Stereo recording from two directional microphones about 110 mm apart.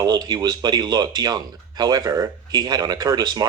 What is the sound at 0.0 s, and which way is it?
Speech, 40° right (ahead or behind).